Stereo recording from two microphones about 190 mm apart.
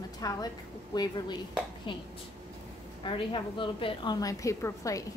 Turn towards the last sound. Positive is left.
turn(degrees=15)  # may be behind; listen again after turning